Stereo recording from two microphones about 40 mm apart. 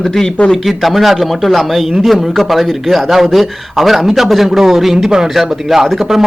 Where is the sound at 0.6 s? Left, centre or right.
Centre.